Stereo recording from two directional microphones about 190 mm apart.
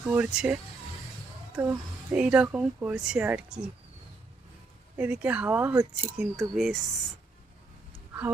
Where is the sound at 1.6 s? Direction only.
10° right (ahead or behind).